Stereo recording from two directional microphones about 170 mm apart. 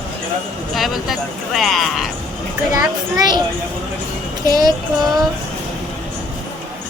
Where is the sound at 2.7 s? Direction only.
25° right (ahead or behind).